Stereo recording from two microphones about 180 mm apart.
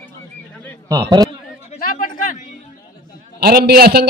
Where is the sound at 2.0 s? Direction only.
50° left (ahead or behind).